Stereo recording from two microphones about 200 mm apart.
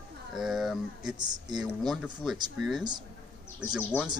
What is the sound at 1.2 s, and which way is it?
Speech, 20° right (ahead or behind).